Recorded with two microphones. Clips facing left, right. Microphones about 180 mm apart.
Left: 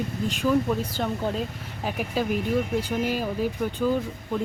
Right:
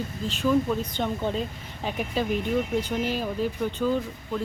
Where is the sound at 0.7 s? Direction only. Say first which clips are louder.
Left 1 dB; 5° left (ahead or behind).